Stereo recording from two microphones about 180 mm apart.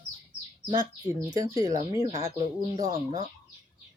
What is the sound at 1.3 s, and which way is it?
Speech, 20° right (ahead or behind).